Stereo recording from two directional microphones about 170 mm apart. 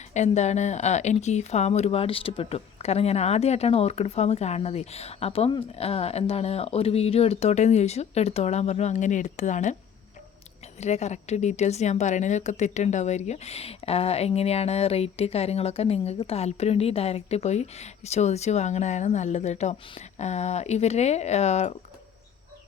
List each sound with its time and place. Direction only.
0.1 s speech: 40° left (ahead or behind)
10.8 s speech: 40° left (ahead or behind)